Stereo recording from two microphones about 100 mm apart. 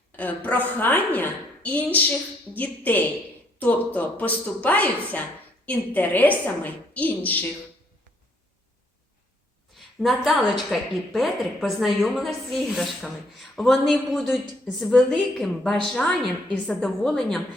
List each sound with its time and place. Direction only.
0.2 s a woman's voice: 15° left (ahead or behind)
9.7 s a woman's voice: centre (ahead or behind)